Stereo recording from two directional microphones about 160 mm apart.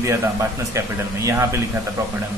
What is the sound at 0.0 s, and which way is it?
Speech, 20° right (ahead or behind).